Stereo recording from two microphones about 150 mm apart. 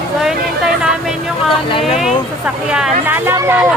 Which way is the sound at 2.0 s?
5° right (ahead or behind).